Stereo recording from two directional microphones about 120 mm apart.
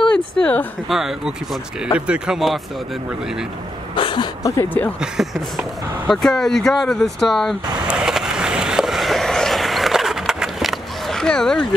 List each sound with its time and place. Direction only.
0.1 s a sound: 10° left (ahead or behind)
0.8 s speech: 5° right (ahead or behind)
3.9 s a sound: 45° left (ahead or behind)
4.4 s speech: 25° left (ahead or behind)
5.1 s speech: centre (ahead or behind)
7.9 s skateboard: 5° right (ahead or behind)